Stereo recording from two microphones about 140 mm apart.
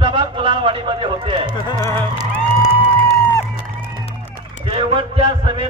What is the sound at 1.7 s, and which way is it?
Speech, 20° left (ahead or behind).